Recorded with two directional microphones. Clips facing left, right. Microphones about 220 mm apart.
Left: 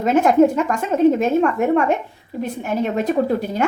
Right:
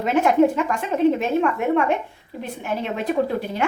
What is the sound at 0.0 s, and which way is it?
A woman's voice, 40° left (ahead or behind).